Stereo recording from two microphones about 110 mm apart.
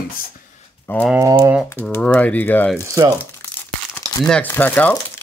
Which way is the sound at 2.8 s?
30° right (ahead or behind).